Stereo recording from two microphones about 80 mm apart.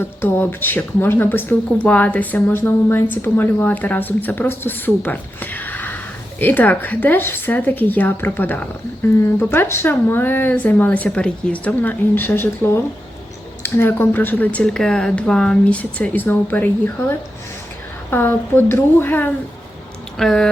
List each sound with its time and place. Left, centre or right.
0.2 s speech: left
14.6 s speech: centre
18.1 s speech: left
20.1 s speech: centre